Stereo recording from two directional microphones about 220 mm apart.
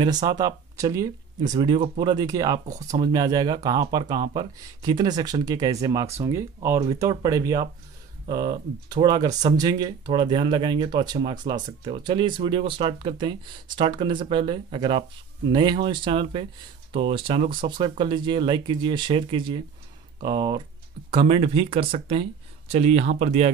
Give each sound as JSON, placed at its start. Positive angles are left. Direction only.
{"t": 0.0, "sound": "speech", "side_deg": -20}